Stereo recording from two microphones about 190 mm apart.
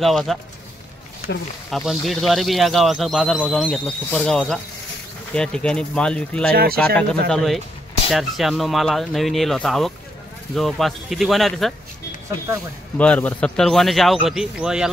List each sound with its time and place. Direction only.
0.0 s speech: centre (ahead or behind)
1.7 s speech: centre (ahead or behind)
6.5 s speech: 55° right (ahead or behind)
7.2 s speech: centre (ahead or behind)
12.9 s speech: 5° left (ahead or behind)